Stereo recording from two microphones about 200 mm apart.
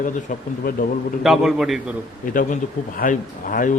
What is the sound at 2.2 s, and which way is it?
Speech, 45° left (ahead or behind).